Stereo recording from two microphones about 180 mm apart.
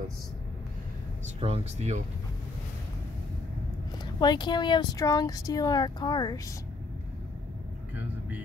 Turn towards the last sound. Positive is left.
turn(degrees=20)  # may be behind; listen again after turning